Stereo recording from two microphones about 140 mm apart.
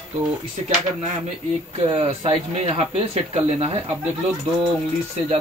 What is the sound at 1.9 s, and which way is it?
Speech, 45° right (ahead or behind).